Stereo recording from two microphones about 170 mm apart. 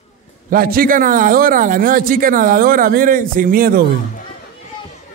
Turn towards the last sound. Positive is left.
turn(degrees=-55)  # may be behind; listen again after turning